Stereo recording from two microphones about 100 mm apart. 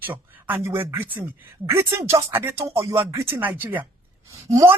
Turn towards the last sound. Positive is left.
turn(degrees=-35)  # may be behind; listen again after turning